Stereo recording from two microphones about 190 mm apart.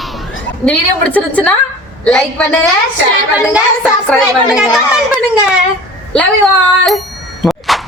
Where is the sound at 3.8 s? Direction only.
10° left (ahead or behind).